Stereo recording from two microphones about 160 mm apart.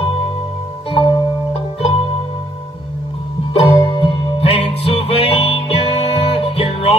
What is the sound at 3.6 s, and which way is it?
Music, 40° left (ahead or behind).